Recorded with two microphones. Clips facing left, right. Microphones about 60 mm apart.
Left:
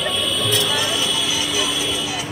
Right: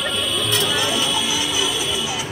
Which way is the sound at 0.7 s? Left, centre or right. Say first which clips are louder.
Right 1 dB; right.